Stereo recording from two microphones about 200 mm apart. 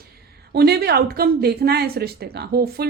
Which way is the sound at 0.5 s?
55° right (ahead or behind).